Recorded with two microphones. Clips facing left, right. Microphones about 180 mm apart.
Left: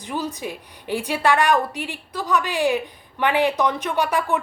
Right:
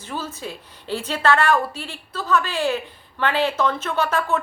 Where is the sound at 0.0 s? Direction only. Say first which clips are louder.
Left 3 dB; 15° left (ahead or behind).